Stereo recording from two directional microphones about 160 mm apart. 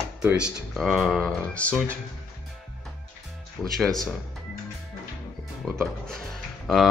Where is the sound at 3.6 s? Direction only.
Centre (ahead or behind).